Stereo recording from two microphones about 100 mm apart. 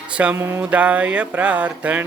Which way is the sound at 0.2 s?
15° right (ahead or behind).